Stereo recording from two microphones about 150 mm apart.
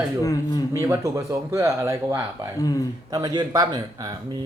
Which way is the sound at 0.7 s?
20° right (ahead or behind).